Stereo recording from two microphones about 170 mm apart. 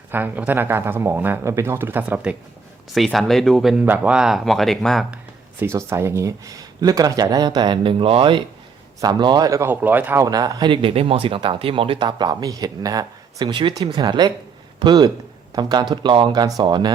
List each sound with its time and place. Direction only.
0.1 s speech: 10° right (ahead or behind)
5.5 s speech: 15° right (ahead or behind)